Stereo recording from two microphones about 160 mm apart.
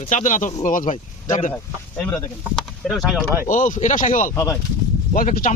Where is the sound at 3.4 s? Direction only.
55° left (ahead or behind).